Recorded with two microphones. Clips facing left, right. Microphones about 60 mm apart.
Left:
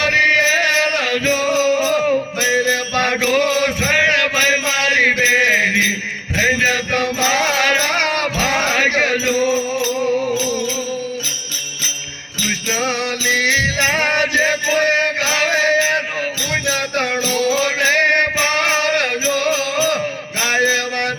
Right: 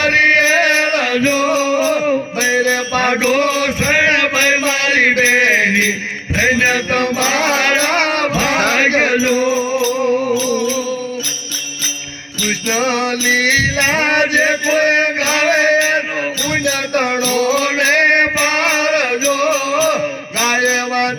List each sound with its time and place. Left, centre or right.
0.0 s chant: right
0.7 s music: right
1.8 s music: centre
3.4 s a sound: centre
5.3 s mantra: centre
6.3 s music: centre
9.4 s music: right
12.7 s music: right
13.6 s music: right
17.3 s music: right
17.8 s music: centre
19.4 s music: right